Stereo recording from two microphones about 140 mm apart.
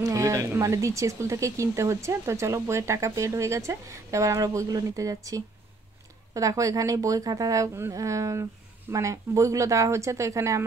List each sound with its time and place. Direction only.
0.0 s speech: 20° right (ahead or behind)